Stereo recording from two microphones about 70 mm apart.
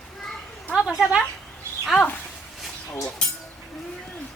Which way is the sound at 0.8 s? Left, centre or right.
Centre.